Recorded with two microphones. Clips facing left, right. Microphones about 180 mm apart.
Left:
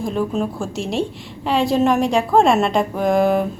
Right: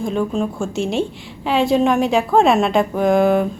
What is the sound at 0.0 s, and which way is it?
A woman's voice, centre (ahead or behind).